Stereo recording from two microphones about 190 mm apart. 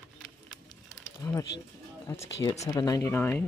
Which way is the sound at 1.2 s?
15° left (ahead or behind).